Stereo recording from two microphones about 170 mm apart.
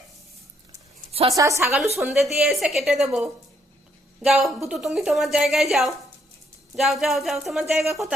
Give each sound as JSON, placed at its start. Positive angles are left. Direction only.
{"t": 1.4, "sound": "a woman's voice", "side_deg": -20}
{"t": 2.0, "sound": "a woman's voice", "side_deg": 0}